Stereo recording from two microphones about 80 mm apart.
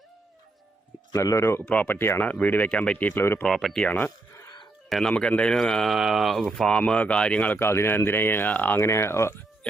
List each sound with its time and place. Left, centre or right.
1.1 s speech: left
1.6 s speech: centre
2.0 s speech: left
3.4 s speech: centre
3.8 s speech: left
4.9 s speech: centre
5.1 s speech: centre
7.5 s speech: left
8.8 s speech: left